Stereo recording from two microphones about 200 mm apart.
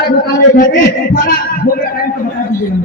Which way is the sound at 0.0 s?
45° left (ahead or behind).